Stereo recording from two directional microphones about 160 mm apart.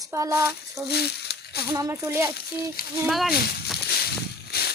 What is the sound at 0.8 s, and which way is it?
Speech, 90° left.